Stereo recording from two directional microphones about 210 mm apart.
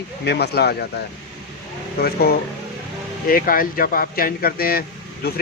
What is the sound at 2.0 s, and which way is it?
Speech, 45° left (ahead or behind).